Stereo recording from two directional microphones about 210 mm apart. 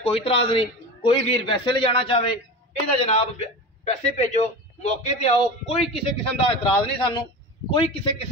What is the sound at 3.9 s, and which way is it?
A man's voice, 35° left (ahead or behind).